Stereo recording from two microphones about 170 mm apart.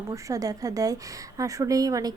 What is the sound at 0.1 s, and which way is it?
A woman's voice, 20° right (ahead or behind).